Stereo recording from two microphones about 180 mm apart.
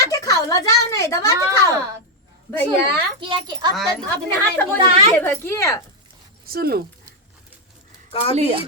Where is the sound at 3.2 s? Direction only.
25° right (ahead or behind).